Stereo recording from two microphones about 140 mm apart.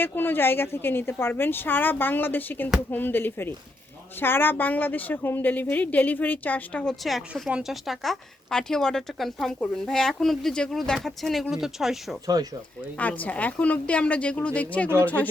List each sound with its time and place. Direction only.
0.0 s a woman's voice: 15° left (ahead or behind); by 12.1 s centre (ahead or behind)
12.4 s speech: 25° right (ahead or behind)
13.0 s speech: 10° left (ahead or behind)